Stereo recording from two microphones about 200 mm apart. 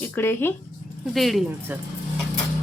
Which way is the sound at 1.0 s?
Centre (ahead or behind).